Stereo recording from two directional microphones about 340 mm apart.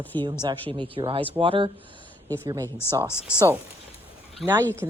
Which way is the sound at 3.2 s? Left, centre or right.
Centre.